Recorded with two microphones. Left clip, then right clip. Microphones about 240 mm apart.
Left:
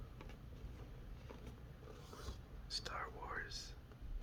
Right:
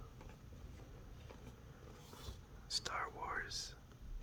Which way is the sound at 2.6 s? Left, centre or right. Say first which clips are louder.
Right 4 dB; centre.